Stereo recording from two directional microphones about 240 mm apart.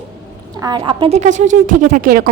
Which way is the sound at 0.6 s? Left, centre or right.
Centre.